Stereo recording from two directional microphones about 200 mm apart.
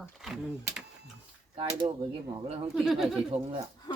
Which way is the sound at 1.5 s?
25° right (ahead or behind).